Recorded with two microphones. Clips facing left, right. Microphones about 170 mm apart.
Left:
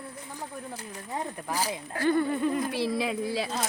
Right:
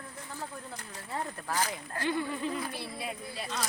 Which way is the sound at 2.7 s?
90° left.